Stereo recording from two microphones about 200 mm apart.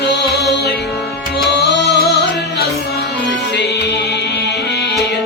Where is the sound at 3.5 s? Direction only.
55° left (ahead or behind).